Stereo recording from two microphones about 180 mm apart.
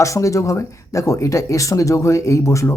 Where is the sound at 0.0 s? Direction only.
15° left (ahead or behind).